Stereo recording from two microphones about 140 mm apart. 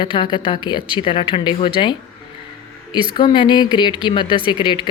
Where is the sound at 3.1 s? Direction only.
35° left (ahead or behind).